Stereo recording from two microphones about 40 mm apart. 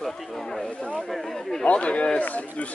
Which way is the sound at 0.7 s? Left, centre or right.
Left.